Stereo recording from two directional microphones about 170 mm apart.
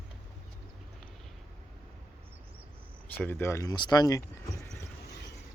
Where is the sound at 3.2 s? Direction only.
15° left (ahead or behind).